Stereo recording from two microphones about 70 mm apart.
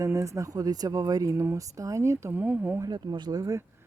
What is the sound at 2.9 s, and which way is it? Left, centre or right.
Speech, right.